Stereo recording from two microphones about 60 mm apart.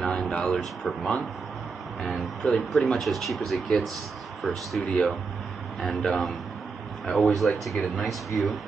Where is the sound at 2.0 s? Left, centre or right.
Centre.